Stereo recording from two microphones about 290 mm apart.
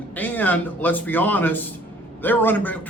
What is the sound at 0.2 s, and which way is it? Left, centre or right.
Speech, centre.